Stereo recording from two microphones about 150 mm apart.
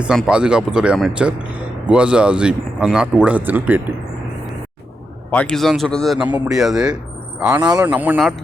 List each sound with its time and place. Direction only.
0.0 s speech: 5° right (ahead or behind)
5.3 s speech: 5° left (ahead or behind)
7.6 s speech: 30° right (ahead or behind)
7.9 s speech: 10° right (ahead or behind)